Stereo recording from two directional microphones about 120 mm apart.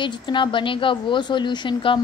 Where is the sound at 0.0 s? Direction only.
40° left (ahead or behind).